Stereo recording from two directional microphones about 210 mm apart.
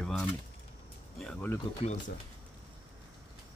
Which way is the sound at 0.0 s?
5° left (ahead or behind).